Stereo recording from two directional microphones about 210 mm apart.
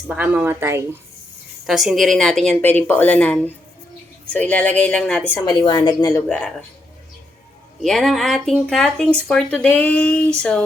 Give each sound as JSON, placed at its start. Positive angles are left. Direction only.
{"t": 0.1, "sound": "speech", "side_deg": -10}
{"t": 1.6, "sound": "a woman's voice", "side_deg": 0}
{"t": 5.5, "sound": "a woman's voice", "side_deg": 20}
{"t": 6.2, "sound": "speech", "side_deg": 5}
{"t": 7.8, "sound": "speech", "side_deg": 0}